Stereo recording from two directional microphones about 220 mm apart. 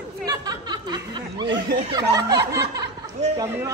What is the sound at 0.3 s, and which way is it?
Snicker, 20° right (ahead or behind).